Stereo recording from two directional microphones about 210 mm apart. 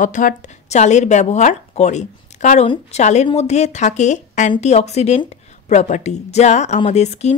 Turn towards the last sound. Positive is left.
turn(degrees=30)  # may be behind; listen again after turning